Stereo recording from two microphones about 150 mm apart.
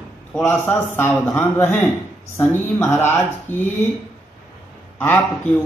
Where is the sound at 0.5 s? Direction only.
15° left (ahead or behind).